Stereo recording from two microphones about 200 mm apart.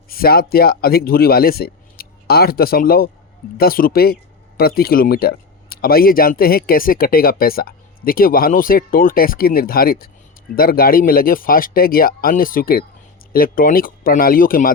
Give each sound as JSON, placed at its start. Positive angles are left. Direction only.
{"t": 0.1, "sound": "speech", "side_deg": 50}